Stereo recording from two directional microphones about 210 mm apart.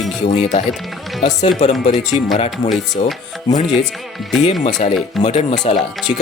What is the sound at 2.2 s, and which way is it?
Speech, 20° left (ahead or behind).